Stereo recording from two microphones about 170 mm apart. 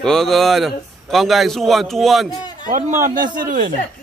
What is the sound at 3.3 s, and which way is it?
Speech, 55° right (ahead or behind).